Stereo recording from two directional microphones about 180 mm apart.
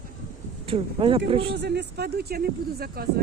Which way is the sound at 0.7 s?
30° right (ahead or behind).